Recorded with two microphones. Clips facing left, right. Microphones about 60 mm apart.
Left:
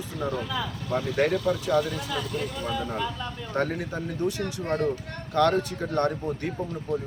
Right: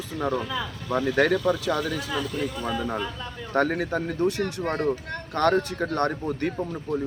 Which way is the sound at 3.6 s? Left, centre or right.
Right.